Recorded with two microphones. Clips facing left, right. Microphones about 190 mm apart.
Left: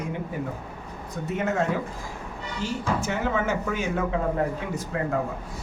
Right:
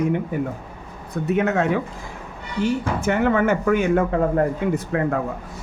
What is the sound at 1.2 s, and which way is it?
Speech, 65° right (ahead or behind).